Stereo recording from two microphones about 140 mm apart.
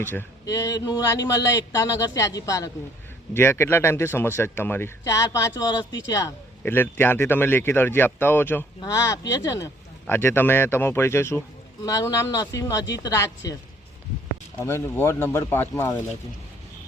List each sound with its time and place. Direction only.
0.0 s a man's voice: 15° left (ahead or behind)
14.6 s a man's voice: 20° left (ahead or behind)